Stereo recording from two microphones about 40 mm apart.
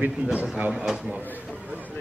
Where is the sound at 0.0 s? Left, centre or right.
Right.